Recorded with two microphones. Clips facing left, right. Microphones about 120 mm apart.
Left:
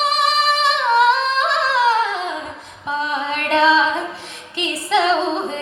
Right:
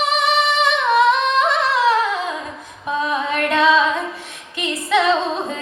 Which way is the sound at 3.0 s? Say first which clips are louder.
Right 3 dB; 30° left (ahead or behind).